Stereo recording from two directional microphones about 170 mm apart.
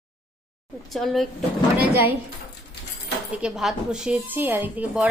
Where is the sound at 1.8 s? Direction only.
10° right (ahead or behind).